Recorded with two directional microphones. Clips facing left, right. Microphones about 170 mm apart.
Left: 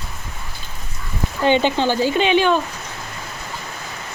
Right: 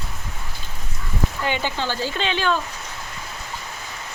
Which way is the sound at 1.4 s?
25° left (ahead or behind).